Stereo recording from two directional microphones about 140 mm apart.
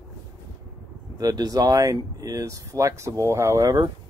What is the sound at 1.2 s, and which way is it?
Speech, 30° right (ahead or behind).